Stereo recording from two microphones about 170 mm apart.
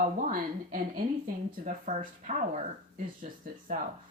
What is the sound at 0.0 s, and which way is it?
Speech, 50° right (ahead or behind).